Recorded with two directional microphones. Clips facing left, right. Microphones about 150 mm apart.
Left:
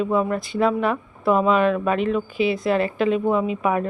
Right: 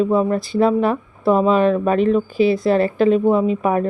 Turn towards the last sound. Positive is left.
turn(degrees=-40)  # may be behind; listen again after turning